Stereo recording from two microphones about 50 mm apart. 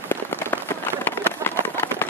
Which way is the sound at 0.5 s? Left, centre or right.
Left.